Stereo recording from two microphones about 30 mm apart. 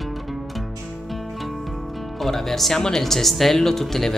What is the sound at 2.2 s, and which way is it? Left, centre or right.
Speech, centre.